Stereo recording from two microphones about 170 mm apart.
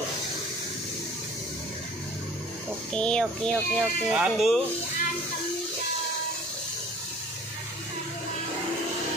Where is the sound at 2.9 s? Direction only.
5° left (ahead or behind).